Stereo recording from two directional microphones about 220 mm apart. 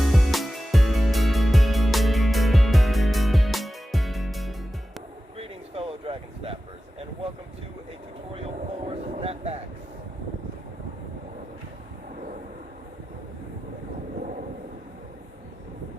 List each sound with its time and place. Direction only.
0.0 s music: centre (ahead or behind)
5.4 s a sound: 25° right (ahead or behind)
8.3 s vehicle: 25° right (ahead or behind)